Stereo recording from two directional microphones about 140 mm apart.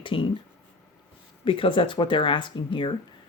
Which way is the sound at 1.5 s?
40° left (ahead or behind).